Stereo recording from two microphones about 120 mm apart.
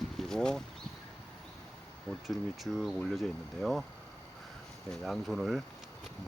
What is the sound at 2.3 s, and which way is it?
Speech, centre (ahead or behind).